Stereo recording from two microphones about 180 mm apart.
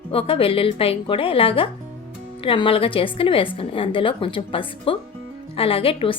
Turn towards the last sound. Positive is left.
turn(degrees=30)  # may be behind; listen again after turning